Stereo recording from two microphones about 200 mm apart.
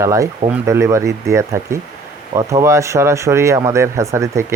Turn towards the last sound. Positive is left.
turn(degrees=-15)  # may be behind; listen again after turning